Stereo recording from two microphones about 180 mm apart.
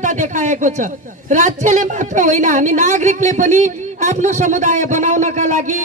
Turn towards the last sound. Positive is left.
turn(degrees=-45)  # may be behind; listen again after turning